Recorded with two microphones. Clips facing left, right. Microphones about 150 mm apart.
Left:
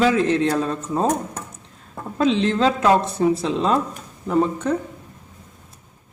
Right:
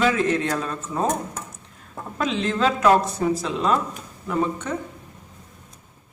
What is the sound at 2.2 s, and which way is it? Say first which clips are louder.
A man's voice: left 5 dB; 30° left (ahead or behind).